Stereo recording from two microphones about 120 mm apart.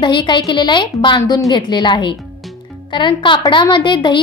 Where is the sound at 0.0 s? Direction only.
40° left (ahead or behind).